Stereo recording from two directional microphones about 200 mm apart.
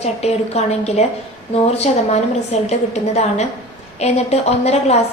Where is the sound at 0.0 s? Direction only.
35° left (ahead or behind).